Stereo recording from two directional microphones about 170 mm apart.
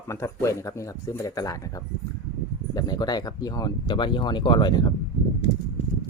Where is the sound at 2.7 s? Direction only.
25° left (ahead or behind).